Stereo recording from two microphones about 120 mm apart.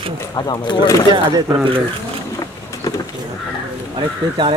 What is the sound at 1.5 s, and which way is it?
Speech, 40° right (ahead or behind).